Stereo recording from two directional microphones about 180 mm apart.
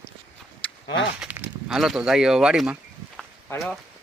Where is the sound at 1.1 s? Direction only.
10° right (ahead or behind).